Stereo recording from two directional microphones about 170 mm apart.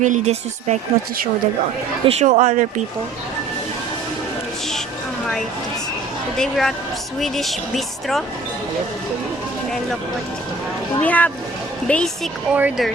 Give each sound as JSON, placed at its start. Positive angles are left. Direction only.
{"t": 0.0, "sound": "speech", "side_deg": -45}
{"t": 2.0, "sound": "speech", "side_deg": -40}
{"t": 6.3, "sound": "speech", "side_deg": 0}
{"t": 11.0, "sound": "speech", "side_deg": 10}